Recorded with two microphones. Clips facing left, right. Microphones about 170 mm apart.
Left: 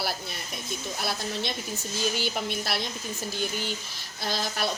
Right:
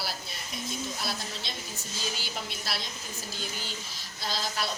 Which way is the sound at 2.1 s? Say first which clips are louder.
Left 8 dB; 60° left (ahead or behind).